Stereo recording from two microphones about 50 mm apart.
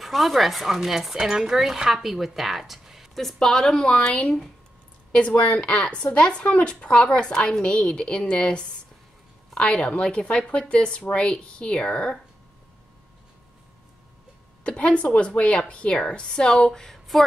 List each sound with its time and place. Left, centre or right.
0.0 s a woman's voice: centre
14.6 s a woman's voice: left; by 17.2 s centre